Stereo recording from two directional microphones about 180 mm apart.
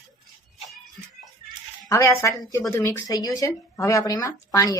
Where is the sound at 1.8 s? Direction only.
15° left (ahead or behind).